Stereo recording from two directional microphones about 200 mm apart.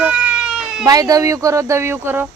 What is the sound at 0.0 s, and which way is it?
Cat, 5° right (ahead or behind).